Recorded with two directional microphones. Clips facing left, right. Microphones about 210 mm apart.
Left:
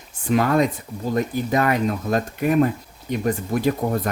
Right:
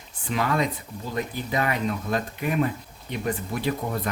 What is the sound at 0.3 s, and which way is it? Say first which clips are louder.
Speech: left 7 dB; 45° left (ahead or behind).